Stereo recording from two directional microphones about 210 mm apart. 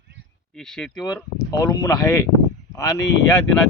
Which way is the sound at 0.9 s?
20° left (ahead or behind).